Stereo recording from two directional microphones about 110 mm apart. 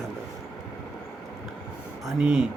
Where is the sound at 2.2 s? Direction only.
10° right (ahead or behind).